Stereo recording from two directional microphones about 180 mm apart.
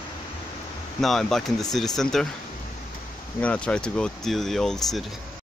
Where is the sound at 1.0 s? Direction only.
Centre (ahead or behind).